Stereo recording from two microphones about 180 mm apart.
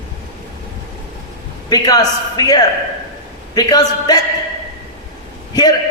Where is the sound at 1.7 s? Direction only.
20° left (ahead or behind).